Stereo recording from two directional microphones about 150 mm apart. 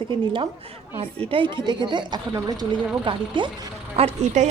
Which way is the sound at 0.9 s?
35° right (ahead or behind).